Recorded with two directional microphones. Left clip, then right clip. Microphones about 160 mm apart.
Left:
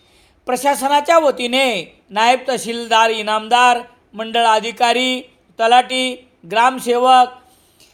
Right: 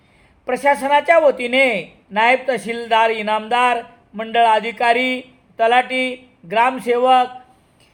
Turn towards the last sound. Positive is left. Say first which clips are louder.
# left 3 dB
turn(degrees=30)  # may be behind; listen again after turning